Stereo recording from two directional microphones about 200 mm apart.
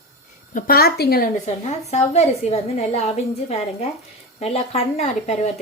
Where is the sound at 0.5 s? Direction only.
50° left (ahead or behind).